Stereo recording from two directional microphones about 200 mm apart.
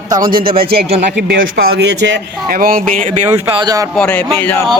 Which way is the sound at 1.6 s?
55° right (ahead or behind).